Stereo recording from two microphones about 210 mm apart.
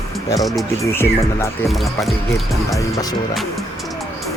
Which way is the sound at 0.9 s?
10° left (ahead or behind).